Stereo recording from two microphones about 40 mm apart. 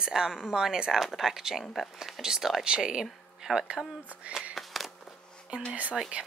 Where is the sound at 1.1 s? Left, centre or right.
Centre.